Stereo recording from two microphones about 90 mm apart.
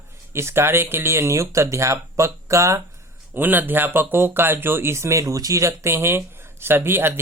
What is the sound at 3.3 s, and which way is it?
Speech, 20° right (ahead or behind).